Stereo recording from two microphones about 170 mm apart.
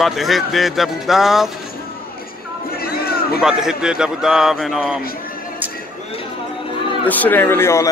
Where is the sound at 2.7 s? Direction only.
60° left (ahead or behind).